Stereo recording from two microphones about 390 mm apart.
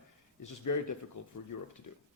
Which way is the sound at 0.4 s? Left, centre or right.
Left.